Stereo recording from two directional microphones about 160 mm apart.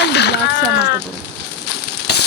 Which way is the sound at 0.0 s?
90° left.